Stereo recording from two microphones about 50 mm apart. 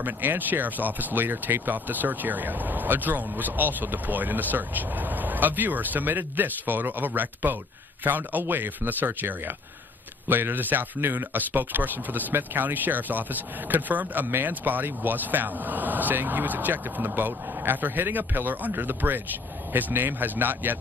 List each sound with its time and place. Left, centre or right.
0.0 s speech: right